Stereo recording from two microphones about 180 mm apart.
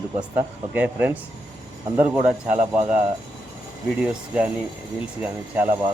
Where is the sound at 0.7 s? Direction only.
10° right (ahead or behind).